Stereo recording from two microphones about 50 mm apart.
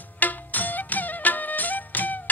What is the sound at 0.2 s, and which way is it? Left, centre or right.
Music, left.